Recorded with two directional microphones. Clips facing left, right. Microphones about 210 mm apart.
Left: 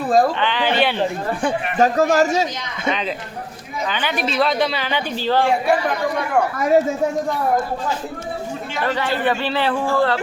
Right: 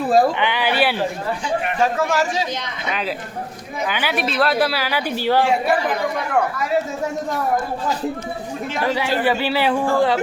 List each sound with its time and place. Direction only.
0.1 s a man's voice: 10° right (ahead or behind)
1.8 s a man's voice: 40° left (ahead or behind)
3.8 s speech: 5° right (ahead or behind)
8.9 s a man's voice: 10° right (ahead or behind)